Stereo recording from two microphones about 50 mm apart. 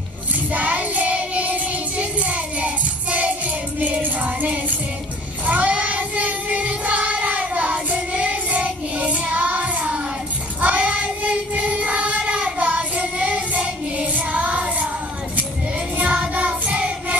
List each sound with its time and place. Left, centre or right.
0.5 s child singing: right
3.8 s music: right
5.5 s child singing: right
16.4 s child singing: right